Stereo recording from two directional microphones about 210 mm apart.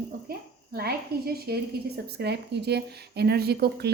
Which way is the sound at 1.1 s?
45° right (ahead or behind).